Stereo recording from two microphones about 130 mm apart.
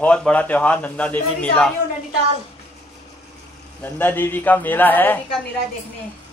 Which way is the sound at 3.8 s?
15° left (ahead or behind).